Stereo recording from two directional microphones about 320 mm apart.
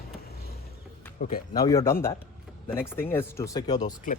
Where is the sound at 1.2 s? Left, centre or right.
Left.